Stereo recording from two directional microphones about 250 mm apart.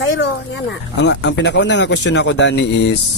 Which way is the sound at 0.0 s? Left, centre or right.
Left.